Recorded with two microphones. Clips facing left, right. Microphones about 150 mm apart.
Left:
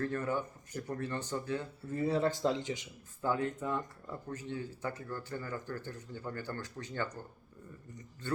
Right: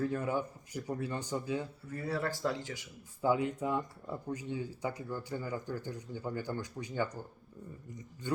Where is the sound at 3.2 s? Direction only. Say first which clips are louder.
Right 3 dB; 10° right (ahead or behind).